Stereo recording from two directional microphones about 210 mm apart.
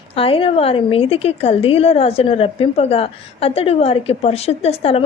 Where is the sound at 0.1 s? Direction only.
25° left (ahead or behind).